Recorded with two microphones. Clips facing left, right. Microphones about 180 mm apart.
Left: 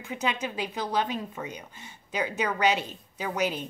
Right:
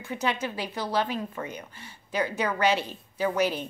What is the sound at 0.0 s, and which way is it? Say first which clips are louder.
A woman's voice: right 1 dB; 15° left (ahead or behind).